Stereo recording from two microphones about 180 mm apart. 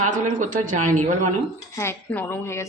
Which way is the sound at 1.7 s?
15° left (ahead or behind).